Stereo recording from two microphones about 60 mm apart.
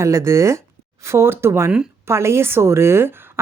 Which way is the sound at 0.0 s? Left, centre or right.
Right.